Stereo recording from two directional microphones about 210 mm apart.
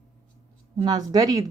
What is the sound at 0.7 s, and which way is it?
Speech, 20° right (ahead or behind).